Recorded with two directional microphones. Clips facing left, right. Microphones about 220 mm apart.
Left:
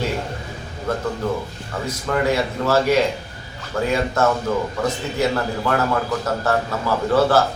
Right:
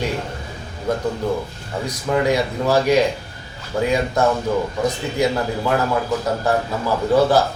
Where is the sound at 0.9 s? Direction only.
15° right (ahead or behind).